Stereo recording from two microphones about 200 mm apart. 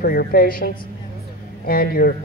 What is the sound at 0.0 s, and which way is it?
Speech, 45° left (ahead or behind).